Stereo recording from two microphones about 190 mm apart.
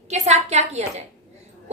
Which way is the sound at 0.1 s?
35° right (ahead or behind).